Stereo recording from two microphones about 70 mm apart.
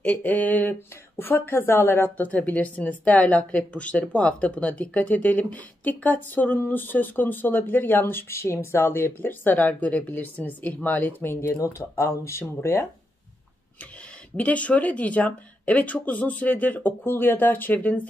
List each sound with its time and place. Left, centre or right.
0.0 s a woman's voice: left
2.2 s a woman's voice: left
12.0 s speech: left
14.3 s a woman's voice: centre